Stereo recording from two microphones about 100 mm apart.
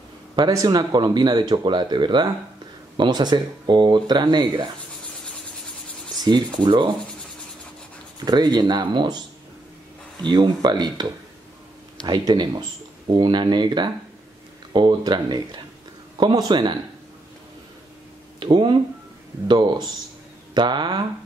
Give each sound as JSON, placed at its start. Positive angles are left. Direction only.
{"t": 0.5, "sound": "speech", "side_deg": -40}
{"t": 6.2, "sound": "speech", "side_deg": -50}
{"t": 8.3, "sound": "speech", "side_deg": -45}
{"t": 10.2, "sound": "speech", "side_deg": -50}
{"t": 12.1, "sound": "speech", "side_deg": -50}
{"t": 18.4, "sound": "speech", "side_deg": -50}